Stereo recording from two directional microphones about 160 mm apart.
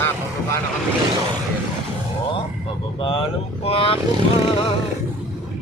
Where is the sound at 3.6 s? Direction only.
35° left (ahead or behind).